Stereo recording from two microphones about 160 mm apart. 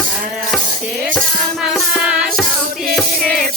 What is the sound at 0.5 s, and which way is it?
Cutlery, centre (ahead or behind).